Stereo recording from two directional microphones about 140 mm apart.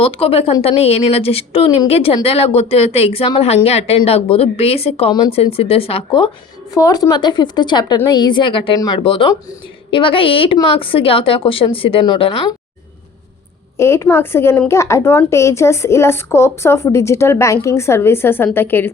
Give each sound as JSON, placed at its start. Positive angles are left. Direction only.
{"t": 0.0, "sound": "a woman's voice", "side_deg": 45}
{"t": 6.7, "sound": "a woman's voice", "side_deg": 25}
{"t": 13.7, "sound": "a woman's voice", "side_deg": 20}